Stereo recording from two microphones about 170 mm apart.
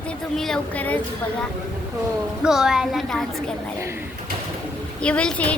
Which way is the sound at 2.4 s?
5° right (ahead or behind).